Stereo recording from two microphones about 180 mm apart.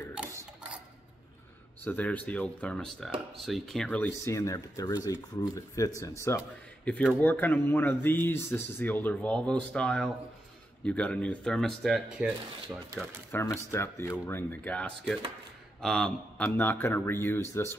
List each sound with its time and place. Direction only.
1.9 s speech: 10° left (ahead or behind)
13.3 s speech: 10° left (ahead or behind)